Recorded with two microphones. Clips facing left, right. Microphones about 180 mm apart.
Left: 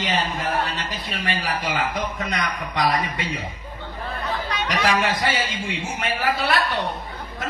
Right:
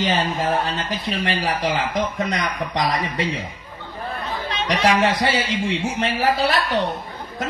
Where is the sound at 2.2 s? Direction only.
40° right (ahead or behind).